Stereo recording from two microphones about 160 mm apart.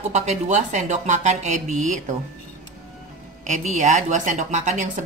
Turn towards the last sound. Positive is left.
turn(degrees=-50)  # may be behind; listen again after turning